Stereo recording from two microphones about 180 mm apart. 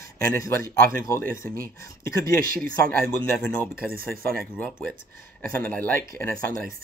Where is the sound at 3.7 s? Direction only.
55° right (ahead or behind).